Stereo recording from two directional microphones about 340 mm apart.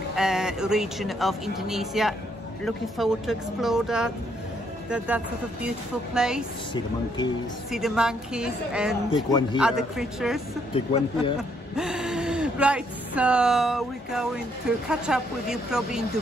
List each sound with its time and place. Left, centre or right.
0.1 s speech: centre
7.7 s speech: centre
9.1 s speech: centre
9.6 s speech: centre
10.7 s speech: centre
11.7 s speech: centre